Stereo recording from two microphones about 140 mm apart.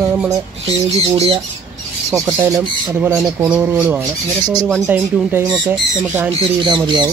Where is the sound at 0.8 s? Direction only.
50° right (ahead or behind).